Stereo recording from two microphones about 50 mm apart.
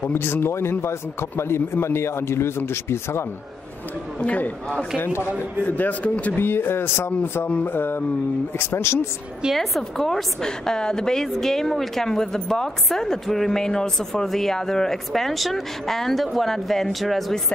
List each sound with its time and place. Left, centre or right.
0.1 s a man's voice: left
4.2 s a man's voice: left
5.7 s speech: left
6.3 s speech: left
7.1 s speech: left
7.7 s speech: left
9.5 s a woman's voice: centre